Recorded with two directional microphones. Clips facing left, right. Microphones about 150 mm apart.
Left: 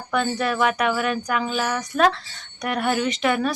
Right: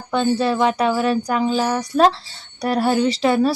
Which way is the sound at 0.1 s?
30° right (ahead or behind).